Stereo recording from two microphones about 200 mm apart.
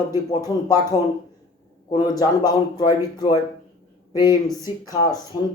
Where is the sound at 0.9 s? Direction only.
25° left (ahead or behind).